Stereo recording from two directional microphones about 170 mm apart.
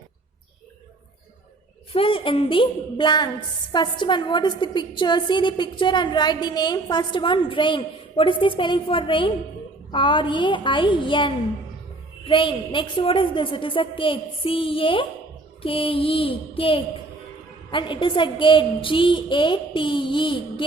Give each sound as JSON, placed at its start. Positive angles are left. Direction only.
{"t": 1.9, "sound": "a woman's voice", "side_deg": 30}